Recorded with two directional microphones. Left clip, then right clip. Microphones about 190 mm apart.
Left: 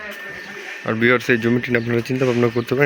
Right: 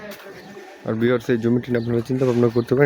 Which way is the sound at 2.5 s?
20° right (ahead or behind).